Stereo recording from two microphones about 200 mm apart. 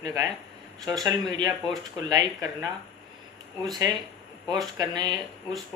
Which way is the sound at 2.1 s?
20° right (ahead or behind).